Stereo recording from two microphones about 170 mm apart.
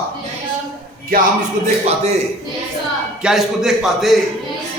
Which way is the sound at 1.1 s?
60° right (ahead or behind).